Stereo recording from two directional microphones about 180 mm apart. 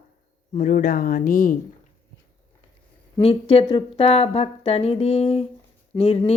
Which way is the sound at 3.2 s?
35° left (ahead or behind).